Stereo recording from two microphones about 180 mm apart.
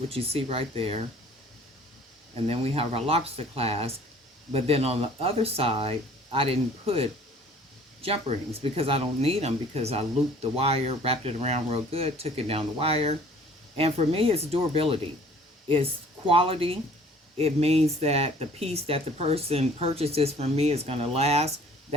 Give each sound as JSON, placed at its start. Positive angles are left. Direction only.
{"t": 0.1, "sound": "speech", "side_deg": -35}
{"t": 2.5, "sound": "speech", "side_deg": -35}
{"t": 16.3, "sound": "speech", "side_deg": -30}